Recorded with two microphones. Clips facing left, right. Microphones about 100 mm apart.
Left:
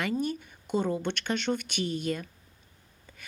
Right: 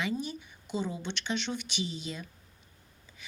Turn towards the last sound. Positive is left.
turn(degrees=55)  # may be behind; listen again after turning